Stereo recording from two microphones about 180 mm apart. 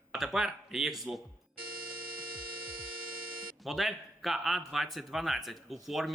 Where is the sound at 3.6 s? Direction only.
Centre (ahead or behind).